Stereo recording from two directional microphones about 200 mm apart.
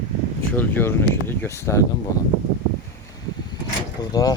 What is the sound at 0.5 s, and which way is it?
Speech, 10° left (ahead or behind).